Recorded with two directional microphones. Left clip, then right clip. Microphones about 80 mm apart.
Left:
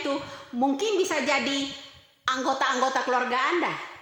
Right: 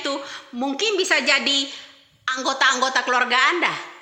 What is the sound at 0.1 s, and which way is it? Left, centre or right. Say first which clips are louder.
A man's voice: right 2 dB; left.